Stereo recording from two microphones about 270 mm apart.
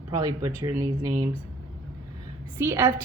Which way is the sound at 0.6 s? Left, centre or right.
Centre.